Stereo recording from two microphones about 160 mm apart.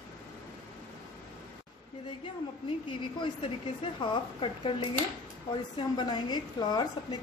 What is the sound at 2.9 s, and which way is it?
A woman's voice, 30° left (ahead or behind).